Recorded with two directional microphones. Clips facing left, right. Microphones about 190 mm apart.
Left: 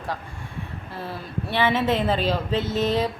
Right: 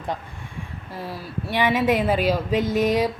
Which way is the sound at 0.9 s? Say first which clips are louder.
Right 1 dB; 15° right (ahead or behind).